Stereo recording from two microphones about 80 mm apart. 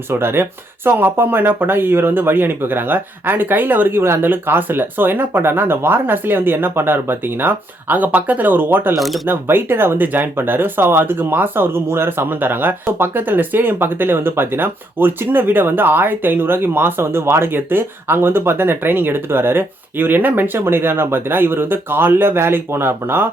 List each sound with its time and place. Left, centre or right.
0.1 s speech: right
9.0 s speech: centre
9.2 s speech: right